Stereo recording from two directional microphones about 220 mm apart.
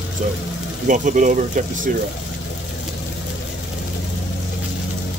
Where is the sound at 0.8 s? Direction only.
35° right (ahead or behind).